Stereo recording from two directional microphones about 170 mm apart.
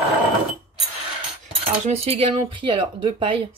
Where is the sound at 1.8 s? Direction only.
35° right (ahead or behind).